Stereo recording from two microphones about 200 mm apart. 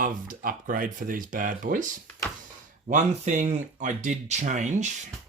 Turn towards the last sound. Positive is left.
turn(degrees=-35)  # may be behind; listen again after turning